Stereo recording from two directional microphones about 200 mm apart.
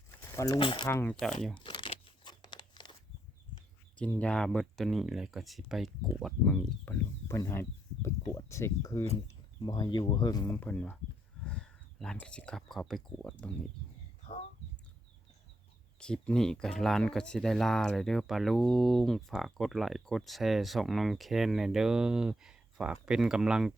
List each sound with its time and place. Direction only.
0.2 s speech: 15° left (ahead or behind)
0.9 s speech: 10° left (ahead or behind)
1.5 s crumpling: 20° left (ahead or behind)
3.9 s speech: 5° left (ahead or behind)
16.0 s speech: 5° left (ahead or behind)